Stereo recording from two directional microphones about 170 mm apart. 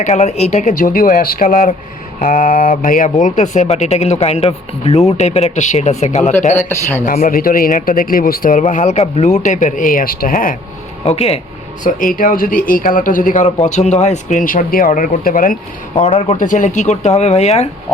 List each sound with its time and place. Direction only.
0.0 s speech: 40° left (ahead or behind)
7.0 s speech: 55° left (ahead or behind)
11.0 s speech: 35° left (ahead or behind)
11.8 s speech: 50° left (ahead or behind)
16.0 s speech: 30° left (ahead or behind)